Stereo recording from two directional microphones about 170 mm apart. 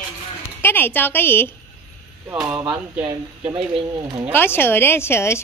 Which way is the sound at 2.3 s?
5° right (ahead or behind).